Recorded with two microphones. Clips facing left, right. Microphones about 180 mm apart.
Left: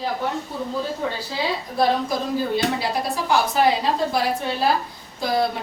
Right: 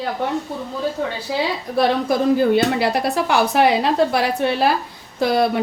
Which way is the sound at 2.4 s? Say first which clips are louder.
Right 6 dB; 65° right (ahead or behind).